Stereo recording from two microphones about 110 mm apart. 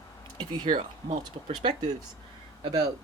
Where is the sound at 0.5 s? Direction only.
45° right (ahead or behind).